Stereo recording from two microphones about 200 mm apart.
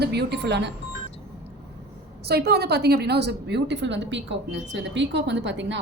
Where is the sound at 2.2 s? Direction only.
55° right (ahead or behind).